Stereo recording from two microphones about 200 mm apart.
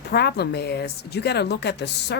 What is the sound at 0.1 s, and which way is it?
Speech, 55° left (ahead or behind).